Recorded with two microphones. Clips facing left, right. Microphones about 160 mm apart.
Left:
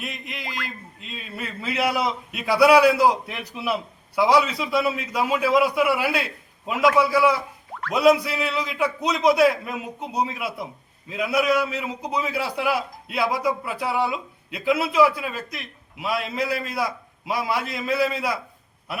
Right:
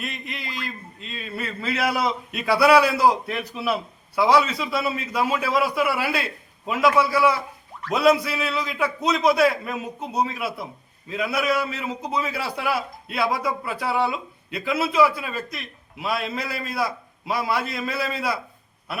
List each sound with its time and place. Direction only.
0.0 s a man's voice: 10° left (ahead or behind)
0.4 s speech: 70° left (ahead or behind)
1.0 s a man's voice: 10° left (ahead or behind)